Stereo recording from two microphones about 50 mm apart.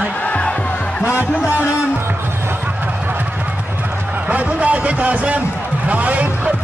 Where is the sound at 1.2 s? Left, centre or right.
Right.